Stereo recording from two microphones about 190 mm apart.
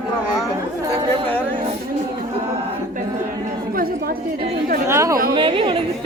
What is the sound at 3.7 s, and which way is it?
Chatter, 50° right (ahead or behind).